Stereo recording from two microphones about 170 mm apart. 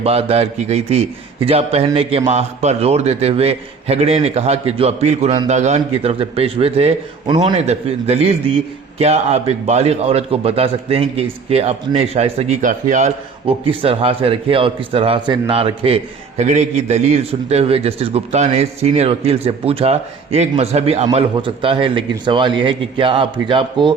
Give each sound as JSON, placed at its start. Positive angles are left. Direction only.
{"t": 0.0, "sound": "a man's voice", "side_deg": -35}